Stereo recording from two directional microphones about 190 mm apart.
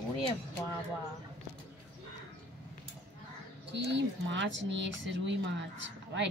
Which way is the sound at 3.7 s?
70° right (ahead or behind).